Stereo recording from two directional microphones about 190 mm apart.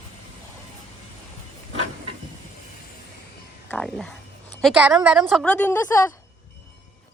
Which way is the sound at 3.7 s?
5° left (ahead or behind).